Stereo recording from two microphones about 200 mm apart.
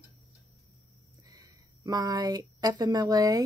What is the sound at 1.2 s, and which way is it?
Speech, 15° right (ahead or behind).